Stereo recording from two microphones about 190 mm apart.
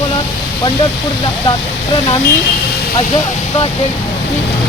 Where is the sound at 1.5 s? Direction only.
25° left (ahead or behind).